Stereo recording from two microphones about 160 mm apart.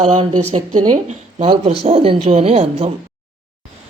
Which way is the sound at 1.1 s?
40° right (ahead or behind).